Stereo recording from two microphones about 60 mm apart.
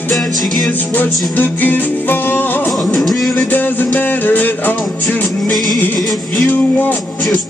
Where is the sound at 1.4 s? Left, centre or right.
Left.